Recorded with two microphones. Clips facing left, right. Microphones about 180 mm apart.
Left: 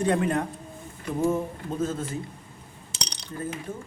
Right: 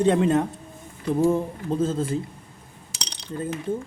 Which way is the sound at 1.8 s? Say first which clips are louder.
Right 4 dB; 30° right (ahead or behind).